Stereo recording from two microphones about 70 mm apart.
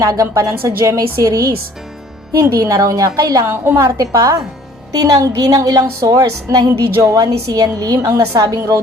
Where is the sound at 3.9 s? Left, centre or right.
Right.